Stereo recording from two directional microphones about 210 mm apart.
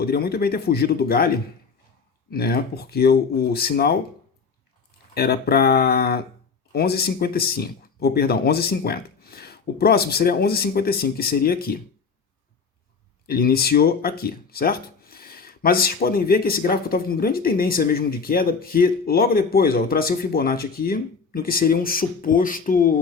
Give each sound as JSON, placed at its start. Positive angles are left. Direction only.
{"t": 0.0, "sound": "speech", "side_deg": 45}
{"t": 2.3, "sound": "speech", "side_deg": 45}
{"t": 5.1, "sound": "speech", "side_deg": 45}
{"t": 13.2, "sound": "speech", "side_deg": 45}